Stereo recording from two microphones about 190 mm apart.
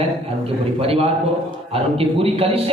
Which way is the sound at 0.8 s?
30° right (ahead or behind).